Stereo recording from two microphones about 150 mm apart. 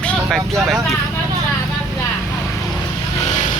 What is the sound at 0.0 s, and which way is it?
Vehicle, 5° left (ahead or behind).